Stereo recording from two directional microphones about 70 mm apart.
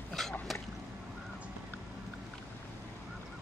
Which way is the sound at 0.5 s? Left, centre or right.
Centre.